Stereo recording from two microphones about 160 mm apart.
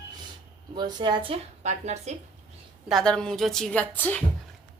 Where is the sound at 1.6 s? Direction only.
45° right (ahead or behind).